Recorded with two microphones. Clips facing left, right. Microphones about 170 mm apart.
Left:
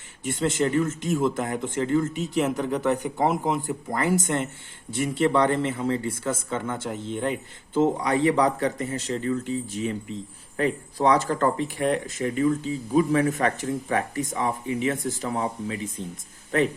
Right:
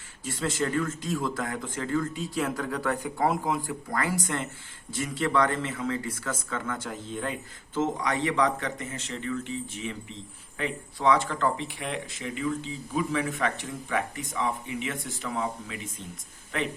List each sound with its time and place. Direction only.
0.3 s speech: 25° left (ahead or behind)